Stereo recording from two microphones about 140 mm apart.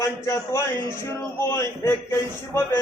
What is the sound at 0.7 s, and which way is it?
Speech, 30° right (ahead or behind).